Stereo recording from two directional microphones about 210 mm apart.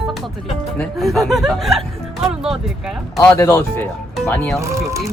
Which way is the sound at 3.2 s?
15° left (ahead or behind).